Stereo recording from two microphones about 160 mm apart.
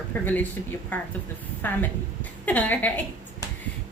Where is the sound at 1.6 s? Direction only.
10° left (ahead or behind).